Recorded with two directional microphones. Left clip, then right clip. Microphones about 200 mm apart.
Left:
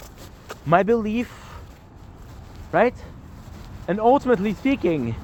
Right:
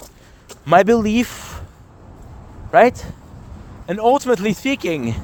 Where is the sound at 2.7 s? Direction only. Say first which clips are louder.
Right 7 dB; 40° right (ahead or behind).